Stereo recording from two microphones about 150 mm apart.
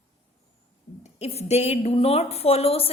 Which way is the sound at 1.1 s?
45° left (ahead or behind).